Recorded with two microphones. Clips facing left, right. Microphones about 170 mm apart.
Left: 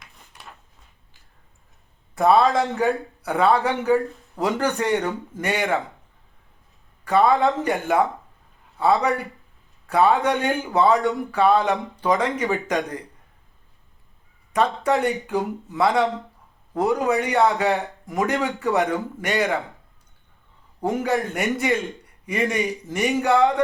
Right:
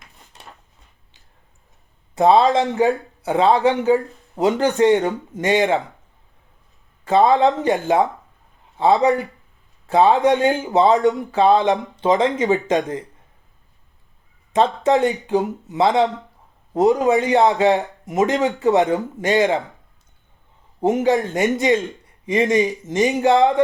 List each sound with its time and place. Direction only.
2.1 s speech: 20° right (ahead or behind)
7.0 s speech: 25° right (ahead or behind)
14.5 s speech: 25° right (ahead or behind)
20.8 s speech: 20° right (ahead or behind)